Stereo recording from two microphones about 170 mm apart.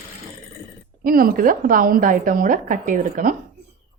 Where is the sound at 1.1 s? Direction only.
55° right (ahead or behind).